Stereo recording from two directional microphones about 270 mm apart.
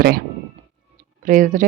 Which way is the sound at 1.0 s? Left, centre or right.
Right.